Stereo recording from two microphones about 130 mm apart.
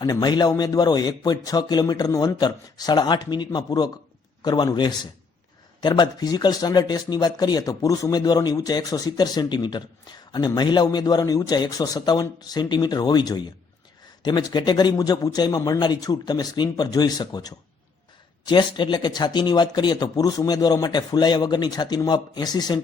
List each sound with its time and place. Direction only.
0.0 s speech: 35° left (ahead or behind)